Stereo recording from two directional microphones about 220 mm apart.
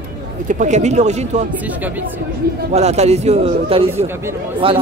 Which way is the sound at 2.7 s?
30° right (ahead or behind).